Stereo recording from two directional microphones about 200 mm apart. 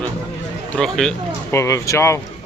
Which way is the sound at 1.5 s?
15° left (ahead or behind).